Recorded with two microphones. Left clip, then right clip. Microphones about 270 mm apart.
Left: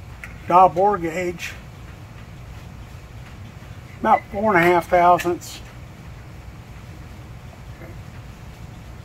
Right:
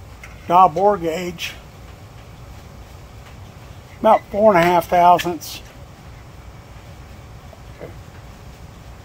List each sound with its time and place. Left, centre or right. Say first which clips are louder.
0.5 s speech: right 1 dB; right
4.0 s speech: right 5 dB; right